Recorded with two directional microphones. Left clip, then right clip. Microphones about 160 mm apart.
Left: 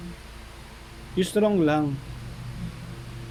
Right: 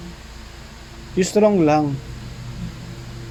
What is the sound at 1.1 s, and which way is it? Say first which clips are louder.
Speech: right 7 dB; 5° right (ahead or behind).